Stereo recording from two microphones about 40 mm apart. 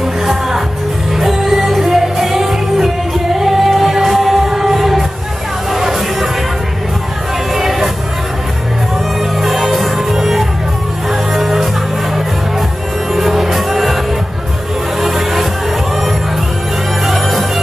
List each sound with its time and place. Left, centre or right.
1.1 s music: centre
7.5 s music: centre
9.4 s music: centre
13.1 s music: centre
15.0 s music: centre
17.0 s music: centre